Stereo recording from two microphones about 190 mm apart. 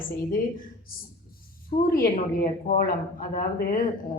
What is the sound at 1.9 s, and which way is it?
A woman's voice, 50° left (ahead or behind).